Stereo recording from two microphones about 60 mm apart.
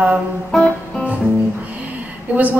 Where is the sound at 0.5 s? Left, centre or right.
Centre.